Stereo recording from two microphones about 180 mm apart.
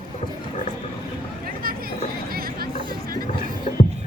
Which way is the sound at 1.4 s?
55° right (ahead or behind).